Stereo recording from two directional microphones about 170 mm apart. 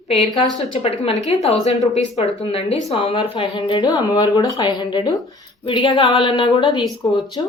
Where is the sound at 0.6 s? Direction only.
35° left (ahead or behind).